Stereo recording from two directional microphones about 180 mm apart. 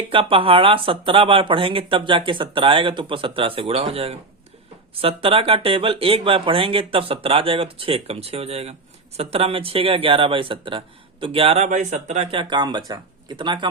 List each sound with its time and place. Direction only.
0.1 s speech: 30° right (ahead or behind)